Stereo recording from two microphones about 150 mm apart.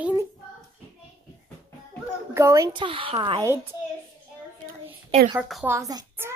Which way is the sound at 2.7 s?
35° right (ahead or behind).